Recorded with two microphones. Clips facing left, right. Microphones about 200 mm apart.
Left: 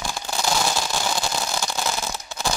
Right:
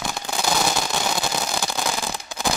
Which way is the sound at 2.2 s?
15° right (ahead or behind).